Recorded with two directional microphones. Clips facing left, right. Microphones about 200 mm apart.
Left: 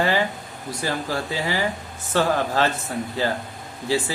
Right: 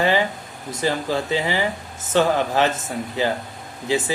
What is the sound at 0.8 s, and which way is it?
Speech, 20° right (ahead or behind).